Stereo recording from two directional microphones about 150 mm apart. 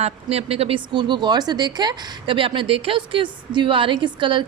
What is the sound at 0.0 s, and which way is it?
A woman's voice, 45° right (ahead or behind).